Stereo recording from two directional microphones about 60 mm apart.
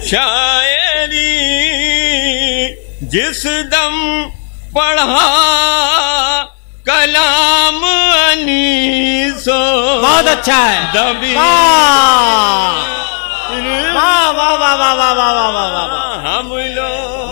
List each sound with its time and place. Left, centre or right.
0.1 s music: left
4.7 s a sound: left
6.9 s music: left
10.6 s a man's voice: left